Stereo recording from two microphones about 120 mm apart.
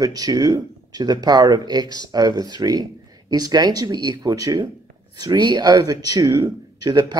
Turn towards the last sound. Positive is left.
turn(degrees=-35)  # may be behind; listen again after turning